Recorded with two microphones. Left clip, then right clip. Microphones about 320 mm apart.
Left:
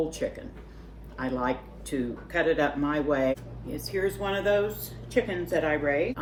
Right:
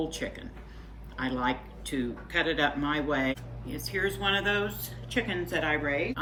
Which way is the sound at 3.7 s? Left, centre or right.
Centre.